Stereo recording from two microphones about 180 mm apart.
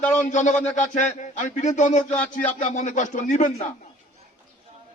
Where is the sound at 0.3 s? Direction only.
40° left (ahead or behind).